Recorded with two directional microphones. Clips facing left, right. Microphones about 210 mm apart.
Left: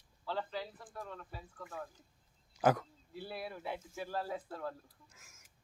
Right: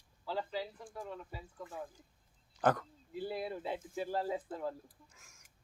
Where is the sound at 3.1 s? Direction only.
20° right (ahead or behind).